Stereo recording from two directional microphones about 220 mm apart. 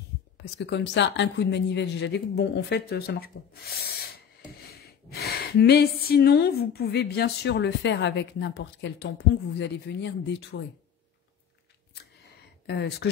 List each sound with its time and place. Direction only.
0.6 s a woman's voice: 50° left (ahead or behind)
12.6 s a woman's voice: 50° left (ahead or behind)